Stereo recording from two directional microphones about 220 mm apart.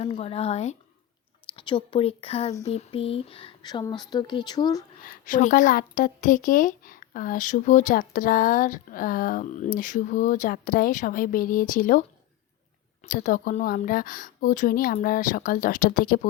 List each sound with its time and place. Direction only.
0.0 s speech: 25° left (ahead or behind)
5.0 s speech: 35° left (ahead or behind)
13.1 s speech: 35° left (ahead or behind)